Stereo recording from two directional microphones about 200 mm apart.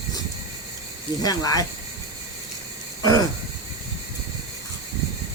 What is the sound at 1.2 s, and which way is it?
Speech, 20° left (ahead or behind).